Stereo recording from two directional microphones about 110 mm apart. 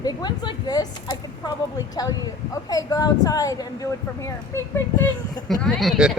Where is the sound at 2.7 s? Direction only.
35° left (ahead or behind).